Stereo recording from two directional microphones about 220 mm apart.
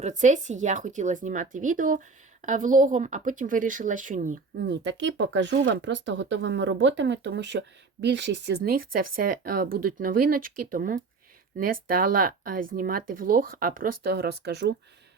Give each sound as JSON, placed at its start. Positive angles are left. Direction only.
{"t": 0.0, "sound": "a woman's voice", "side_deg": -35}
{"t": 4.6, "sound": "speech", "side_deg": -55}
{"t": 8.6, "sound": "a woman's voice", "side_deg": -40}